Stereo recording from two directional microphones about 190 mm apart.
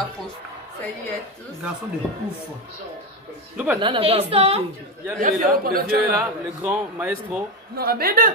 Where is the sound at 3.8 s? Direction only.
30° right (ahead or behind).